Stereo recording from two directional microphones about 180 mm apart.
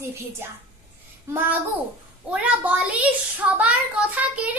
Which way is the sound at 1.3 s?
15° right (ahead or behind).